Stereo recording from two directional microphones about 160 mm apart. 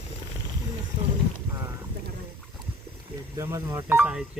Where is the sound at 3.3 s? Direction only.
15° right (ahead or behind).